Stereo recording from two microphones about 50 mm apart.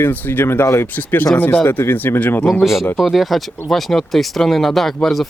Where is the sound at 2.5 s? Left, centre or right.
Centre.